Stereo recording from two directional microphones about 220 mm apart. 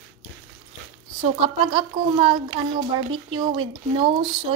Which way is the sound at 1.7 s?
25° right (ahead or behind).